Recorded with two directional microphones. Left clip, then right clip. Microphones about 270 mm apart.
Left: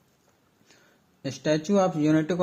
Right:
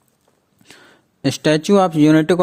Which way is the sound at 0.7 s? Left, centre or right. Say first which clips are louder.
Right 14 dB; right.